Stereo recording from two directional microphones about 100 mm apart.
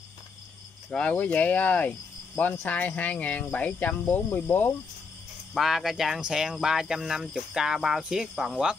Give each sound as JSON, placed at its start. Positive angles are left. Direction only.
{"t": 0.9, "sound": "cricket", "side_deg": 15}
{"t": 5.5, "sound": "speech", "side_deg": 0}